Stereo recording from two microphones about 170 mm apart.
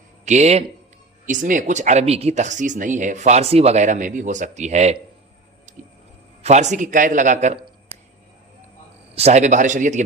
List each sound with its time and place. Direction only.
0.3 s speech: 40° right (ahead or behind)
5.7 s squish: 50° right (ahead or behind)
6.4 s speech: 45° right (ahead or behind)
9.1 s speech: 40° right (ahead or behind)